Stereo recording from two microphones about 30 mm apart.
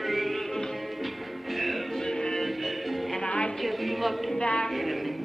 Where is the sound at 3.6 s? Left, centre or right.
Centre.